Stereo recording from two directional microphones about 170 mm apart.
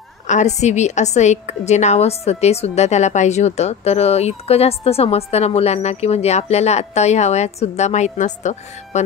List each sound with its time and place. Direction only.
0.3 s a woman's voice: 45° left (ahead or behind)